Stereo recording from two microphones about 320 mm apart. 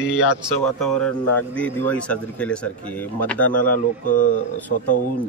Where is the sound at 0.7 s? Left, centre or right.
Centre.